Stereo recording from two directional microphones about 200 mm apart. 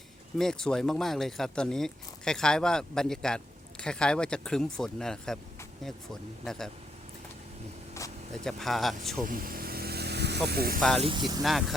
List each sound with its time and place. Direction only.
0.3 s speech: centre (ahead or behind)
6.4 s speech: centre (ahead or behind)
8.4 s speech: centre (ahead or behind)
9.2 s vehicle: 45° right (ahead or behind)
10.8 s speech: centre (ahead or behind)
11.0 s speech: 25° right (ahead or behind)